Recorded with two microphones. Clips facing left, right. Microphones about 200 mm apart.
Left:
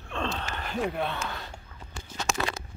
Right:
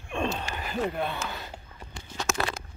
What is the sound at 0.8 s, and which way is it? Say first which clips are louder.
Speech: even; centre (ahead or behind).